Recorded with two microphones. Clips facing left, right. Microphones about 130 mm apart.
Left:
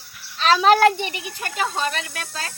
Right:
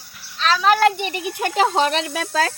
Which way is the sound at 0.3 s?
35° left (ahead or behind).